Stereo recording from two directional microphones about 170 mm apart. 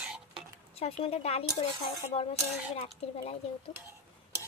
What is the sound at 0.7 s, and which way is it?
A woman's voice, 40° left (ahead or behind).